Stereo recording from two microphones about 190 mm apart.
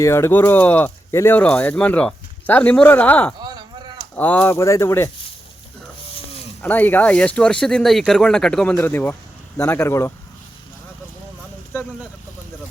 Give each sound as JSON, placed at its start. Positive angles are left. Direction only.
{"t": 0.0, "sound": "speech", "side_deg": 15}
{"t": 3.4, "sound": "a sound", "side_deg": -20}
{"t": 4.1, "sound": "speech", "side_deg": 10}
{"t": 6.6, "sound": "speech", "side_deg": 10}
{"t": 11.7, "sound": "speech", "side_deg": 10}